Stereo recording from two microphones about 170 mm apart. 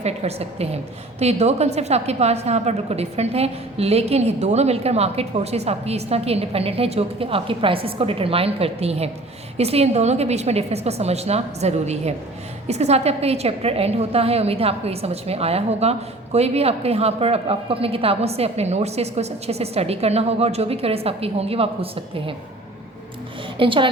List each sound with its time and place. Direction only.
0.0 s a woman's voice: 40° right (ahead or behind)
23.6 s a woman's voice: 30° right (ahead or behind)